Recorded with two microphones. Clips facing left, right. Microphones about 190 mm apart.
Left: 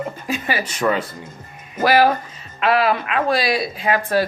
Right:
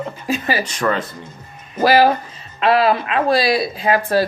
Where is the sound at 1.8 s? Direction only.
35° right (ahead or behind).